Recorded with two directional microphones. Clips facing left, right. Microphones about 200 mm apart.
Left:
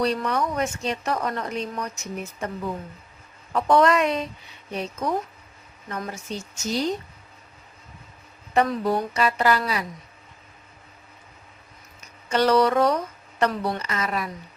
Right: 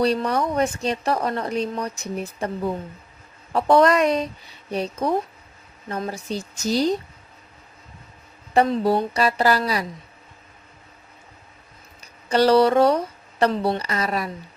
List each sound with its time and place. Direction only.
0.0 s speech: 35° right (ahead or behind)
8.5 s speech: 30° right (ahead or behind)
11.9 s speech: 35° right (ahead or behind)